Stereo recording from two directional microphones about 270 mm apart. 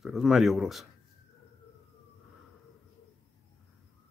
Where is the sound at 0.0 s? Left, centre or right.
Centre.